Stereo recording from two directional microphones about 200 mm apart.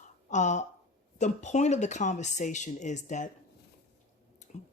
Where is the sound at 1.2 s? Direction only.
35° left (ahead or behind).